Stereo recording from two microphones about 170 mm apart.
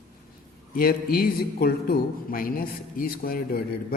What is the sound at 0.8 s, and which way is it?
Speech, 60° left (ahead or behind).